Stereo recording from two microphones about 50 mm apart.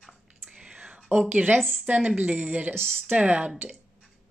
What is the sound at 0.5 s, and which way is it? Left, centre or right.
Whispering, centre.